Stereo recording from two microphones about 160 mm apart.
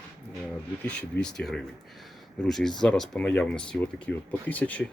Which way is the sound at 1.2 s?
5° left (ahead or behind).